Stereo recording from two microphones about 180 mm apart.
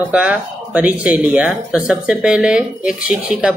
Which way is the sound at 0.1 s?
5° right (ahead or behind).